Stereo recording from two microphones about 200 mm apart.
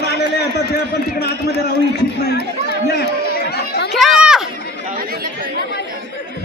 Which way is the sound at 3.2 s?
50° left (ahead or behind).